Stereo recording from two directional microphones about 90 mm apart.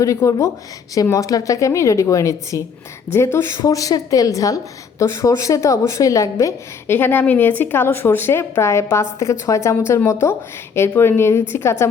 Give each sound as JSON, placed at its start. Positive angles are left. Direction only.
{"t": 0.0, "sound": "a woman's voice", "side_deg": 35}